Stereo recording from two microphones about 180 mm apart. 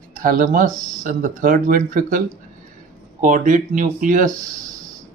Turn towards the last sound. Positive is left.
turn(degrees=-45)  # may be behind; listen again after turning